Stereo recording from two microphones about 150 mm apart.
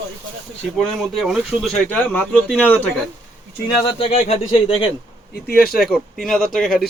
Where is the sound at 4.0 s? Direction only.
40° left (ahead or behind).